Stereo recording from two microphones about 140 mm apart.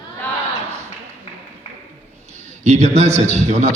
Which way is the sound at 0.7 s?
15° right (ahead or behind).